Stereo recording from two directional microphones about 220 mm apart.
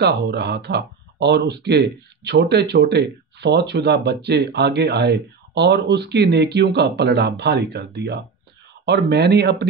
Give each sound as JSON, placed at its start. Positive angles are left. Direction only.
{"t": 0.0, "sound": "speech", "side_deg": -50}